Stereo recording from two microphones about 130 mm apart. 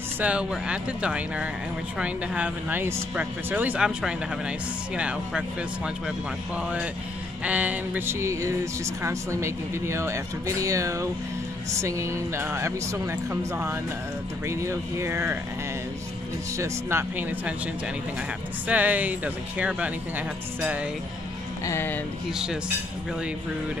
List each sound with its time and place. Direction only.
0.2 s speech: 10° right (ahead or behind)
16.5 s speech: 20° right (ahead or behind)
18.7 s speech: 10° right (ahead or behind)
21.6 s speech: 15° left (ahead or behind)
22.3 s speech: 5° right (ahead or behind)